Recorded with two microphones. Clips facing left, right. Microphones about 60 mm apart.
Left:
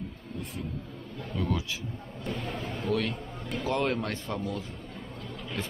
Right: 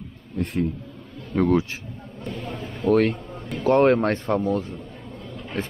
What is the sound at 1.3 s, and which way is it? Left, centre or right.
Speech, right.